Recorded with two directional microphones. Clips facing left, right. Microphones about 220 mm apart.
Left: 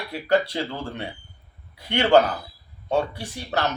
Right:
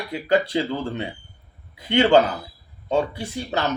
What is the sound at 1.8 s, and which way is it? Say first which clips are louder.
Speech: right 6 dB; 20° right (ahead or behind).